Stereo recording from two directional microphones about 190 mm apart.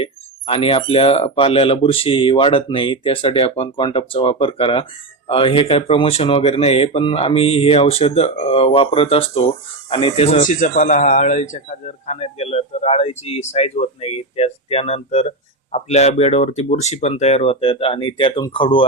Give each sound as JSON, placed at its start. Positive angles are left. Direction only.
{"t": 0.0, "sound": "speech", "side_deg": 30}